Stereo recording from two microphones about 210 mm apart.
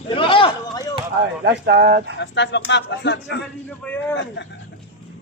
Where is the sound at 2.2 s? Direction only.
55° left (ahead or behind).